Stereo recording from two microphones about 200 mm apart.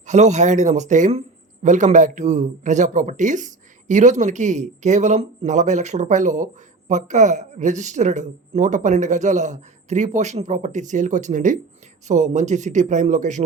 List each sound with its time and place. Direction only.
0.0 s speech: 35° right (ahead or behind)